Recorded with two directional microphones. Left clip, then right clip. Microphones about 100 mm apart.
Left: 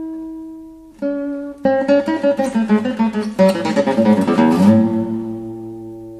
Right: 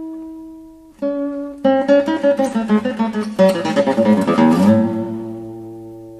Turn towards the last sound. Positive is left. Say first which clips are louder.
# left 2 dB
turn(degrees=-5)  # may be behind; listen again after turning